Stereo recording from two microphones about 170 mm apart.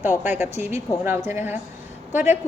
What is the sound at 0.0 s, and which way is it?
A woman's voice, 10° right (ahead or behind).